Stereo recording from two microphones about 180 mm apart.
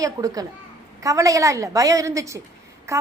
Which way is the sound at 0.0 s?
20° right (ahead or behind).